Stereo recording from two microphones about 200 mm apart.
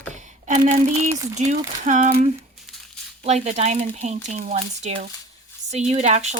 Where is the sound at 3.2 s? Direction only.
35° right (ahead or behind).